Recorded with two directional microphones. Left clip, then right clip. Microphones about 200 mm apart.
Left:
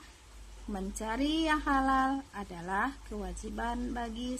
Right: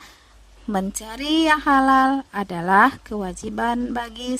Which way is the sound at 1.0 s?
Centre (ahead or behind).